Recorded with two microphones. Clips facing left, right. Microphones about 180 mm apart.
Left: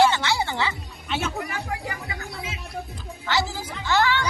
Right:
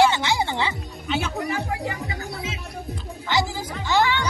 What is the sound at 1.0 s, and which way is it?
Speech, centre (ahead or behind).